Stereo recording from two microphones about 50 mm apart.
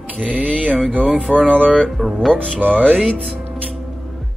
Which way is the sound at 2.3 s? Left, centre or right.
Centre.